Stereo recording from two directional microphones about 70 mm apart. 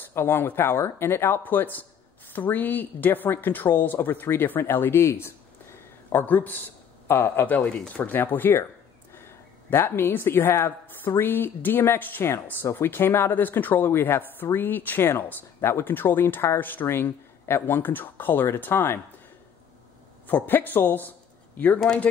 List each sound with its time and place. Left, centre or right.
0.1 s speech: left
6.2 s a man's voice: left
20.2 s speech: left
21.7 s speech: centre